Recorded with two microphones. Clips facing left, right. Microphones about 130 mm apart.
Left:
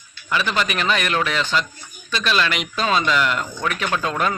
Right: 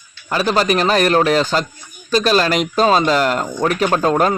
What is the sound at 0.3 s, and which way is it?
Speech, 40° right (ahead or behind).